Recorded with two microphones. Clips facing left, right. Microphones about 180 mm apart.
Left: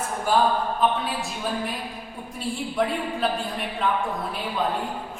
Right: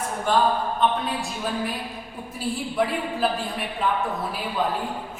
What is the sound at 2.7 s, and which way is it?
Speech, centre (ahead or behind).